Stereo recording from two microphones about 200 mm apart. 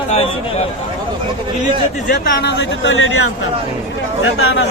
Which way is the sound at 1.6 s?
40° left (ahead or behind).